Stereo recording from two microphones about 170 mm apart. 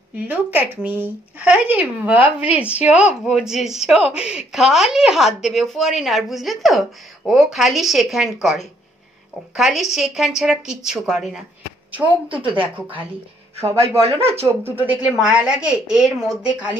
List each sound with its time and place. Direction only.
0.1 s speech: 10° right (ahead or behind)
13.7 s speech: 35° right (ahead or behind)
14.4 s speech: 10° right (ahead or behind)